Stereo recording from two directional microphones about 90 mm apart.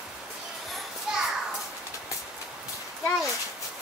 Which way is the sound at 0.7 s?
5° right (ahead or behind).